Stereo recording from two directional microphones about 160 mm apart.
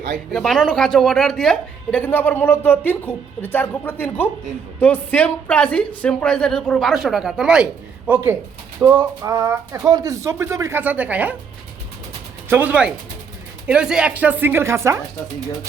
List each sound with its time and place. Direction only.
0.3 s a woman's voice: 5° left (ahead or behind)
12.5 s speech: 10° right (ahead or behind)